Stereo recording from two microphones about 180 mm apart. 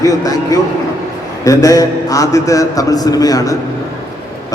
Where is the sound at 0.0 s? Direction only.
20° left (ahead or behind).